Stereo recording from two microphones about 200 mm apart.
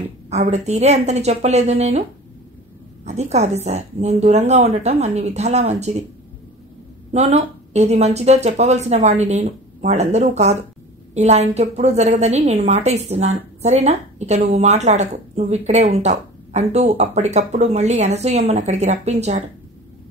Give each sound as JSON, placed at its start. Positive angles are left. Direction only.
{"t": 0.3, "sound": "a woman's voice", "side_deg": -35}
{"t": 3.1, "sound": "a woman's voice", "side_deg": -35}
{"t": 7.1, "sound": "a woman's voice", "side_deg": -35}